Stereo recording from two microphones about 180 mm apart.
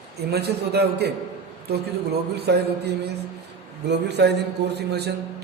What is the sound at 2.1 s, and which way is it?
Speech, 65° right (ahead or behind).